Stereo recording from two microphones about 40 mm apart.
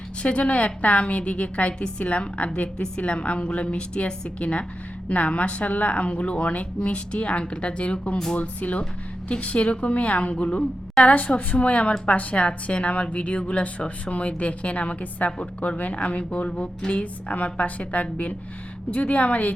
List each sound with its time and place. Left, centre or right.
0.2 s a woman's voice: left